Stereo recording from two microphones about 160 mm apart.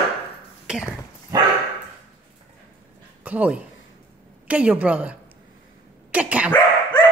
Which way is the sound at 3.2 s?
10° right (ahead or behind).